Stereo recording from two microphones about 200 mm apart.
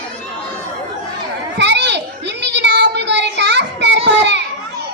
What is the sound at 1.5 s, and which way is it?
Children playing, 60° right (ahead or behind).